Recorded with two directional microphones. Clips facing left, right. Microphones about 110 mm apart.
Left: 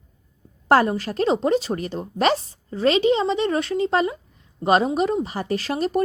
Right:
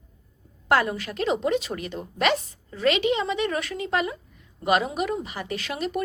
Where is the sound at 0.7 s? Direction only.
35° left (ahead or behind).